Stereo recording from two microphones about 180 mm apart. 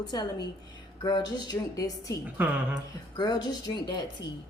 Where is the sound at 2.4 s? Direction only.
10° right (ahead or behind).